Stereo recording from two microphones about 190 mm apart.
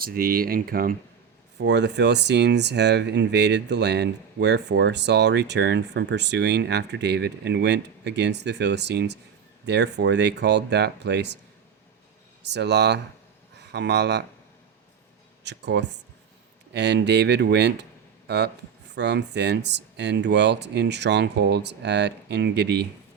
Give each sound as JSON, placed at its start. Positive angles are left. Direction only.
{"t": 0.0, "sound": "speech", "side_deg": -50}
{"t": 1.5, "sound": "speech", "side_deg": -65}
{"t": 12.4, "sound": "speech", "side_deg": -65}
{"t": 15.4, "sound": "speech", "side_deg": -65}